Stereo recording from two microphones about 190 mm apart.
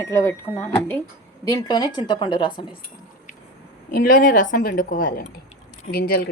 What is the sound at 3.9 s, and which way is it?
A woman's voice, 50° left (ahead or behind).